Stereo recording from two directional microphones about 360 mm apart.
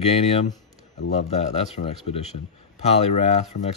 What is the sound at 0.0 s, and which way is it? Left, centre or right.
A man's voice, centre.